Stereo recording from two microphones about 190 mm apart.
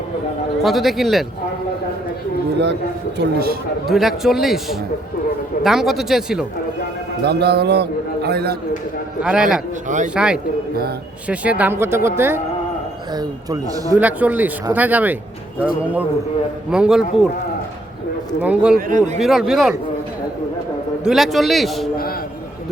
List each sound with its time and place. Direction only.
0.6 s a man's voice: centre (ahead or behind)
3.2 s a man's voice: 55° right (ahead or behind)
3.8 s a man's voice: centre (ahead or behind)
7.3 s a man's voice: 60° right (ahead or behind)
9.2 s a man's voice: 5° right (ahead or behind)
14.0 s a man's voice: 10° right (ahead or behind)
18.4 s a man's voice: 5° right (ahead or behind)
18.9 s speech: 40° right (ahead or behind)
19.2 s a man's voice: centre (ahead or behind)
21.0 s a man's voice: centre (ahead or behind)